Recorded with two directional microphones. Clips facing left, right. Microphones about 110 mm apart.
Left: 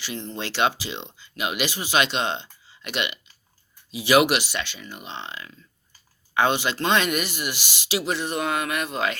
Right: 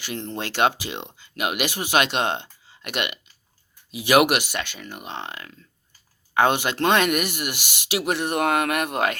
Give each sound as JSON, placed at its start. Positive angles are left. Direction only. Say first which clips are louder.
{"t": 0.0, "sound": "speech", "louder": "right 2 dB", "side_deg": -55}